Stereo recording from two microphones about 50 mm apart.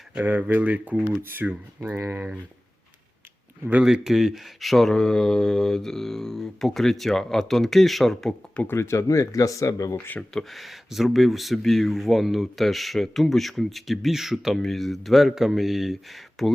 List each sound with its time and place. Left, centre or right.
0.2 s speech: right
1.2 s speech: right
3.8 s speech: centre
8.6 s speech: left
10.3 s speech: centre
14.6 s speech: centre